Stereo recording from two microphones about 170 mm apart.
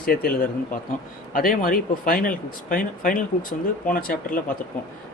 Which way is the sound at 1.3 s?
55° left (ahead or behind).